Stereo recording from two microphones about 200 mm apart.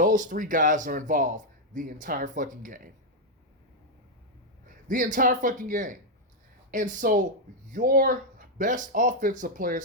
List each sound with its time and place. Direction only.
0.0 s speech: 40° right (ahead or behind)
4.9 s speech: 40° right (ahead or behind)